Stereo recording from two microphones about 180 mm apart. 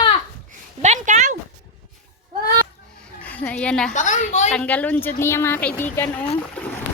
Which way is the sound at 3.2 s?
10° left (ahead or behind).